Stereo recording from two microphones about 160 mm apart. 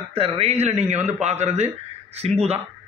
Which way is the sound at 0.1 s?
40° right (ahead or behind).